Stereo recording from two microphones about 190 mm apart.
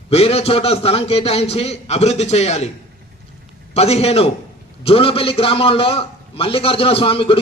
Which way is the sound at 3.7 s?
35° left (ahead or behind).